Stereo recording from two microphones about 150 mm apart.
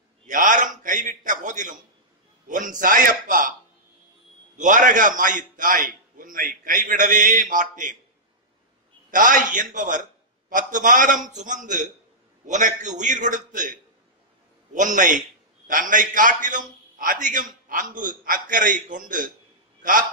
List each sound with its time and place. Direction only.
0.3 s a man's voice: 60° right (ahead or behind)
4.6 s a man's voice: 60° right (ahead or behind)
9.1 s a man's voice: 60° right (ahead or behind)